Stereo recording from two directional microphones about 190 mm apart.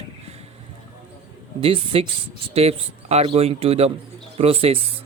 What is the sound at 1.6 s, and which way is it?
Speech, 30° right (ahead or behind).